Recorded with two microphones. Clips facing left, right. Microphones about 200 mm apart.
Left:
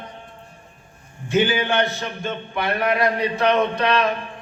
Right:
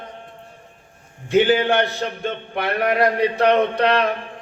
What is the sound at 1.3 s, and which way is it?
A man's voice, 60° right (ahead or behind).